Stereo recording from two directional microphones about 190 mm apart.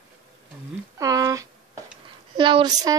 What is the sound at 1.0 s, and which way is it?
A woman's voice, 15° right (ahead or behind).